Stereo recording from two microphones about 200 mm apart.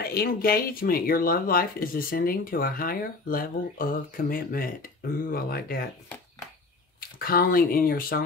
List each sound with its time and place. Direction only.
0.0 s speech: 50° left (ahead or behind)
7.0 s speech: 50° left (ahead or behind)